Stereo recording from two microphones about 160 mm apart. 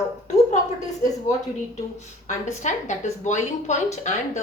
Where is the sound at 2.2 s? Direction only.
50° left (ahead or behind).